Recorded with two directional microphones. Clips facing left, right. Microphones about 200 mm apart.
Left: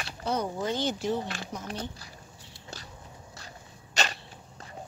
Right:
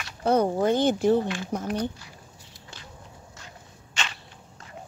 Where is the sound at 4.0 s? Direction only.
40° left (ahead or behind).